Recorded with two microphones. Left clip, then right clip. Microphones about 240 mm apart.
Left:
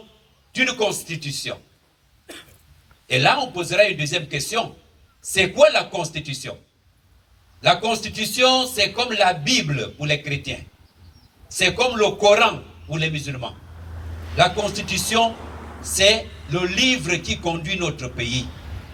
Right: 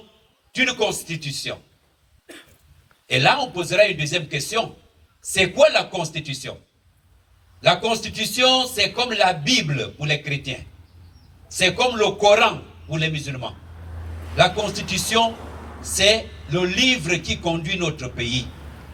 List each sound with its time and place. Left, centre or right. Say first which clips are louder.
0.5 s a man's voice: even; left
2.2 s cough: left 3 dB; left
3.1 s a man's voice: even; left
7.6 s a man's voice: even; left
14.1 s a sound: left 1 dB; right
14.3 s a man's voice: even; left
15.4 s a sound: left 1 dB; centre
15.8 s a man's voice: left 1 dB; left